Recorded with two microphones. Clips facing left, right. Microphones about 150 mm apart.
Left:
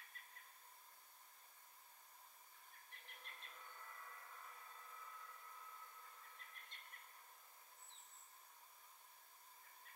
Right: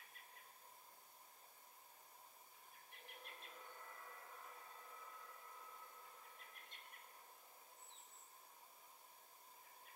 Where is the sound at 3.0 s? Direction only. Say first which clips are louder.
Right 4 dB; 10° right (ahead or behind).